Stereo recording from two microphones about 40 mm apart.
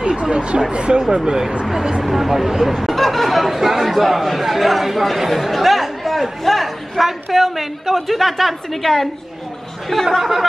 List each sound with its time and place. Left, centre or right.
0.0 s speech: right
2.0 s speech: centre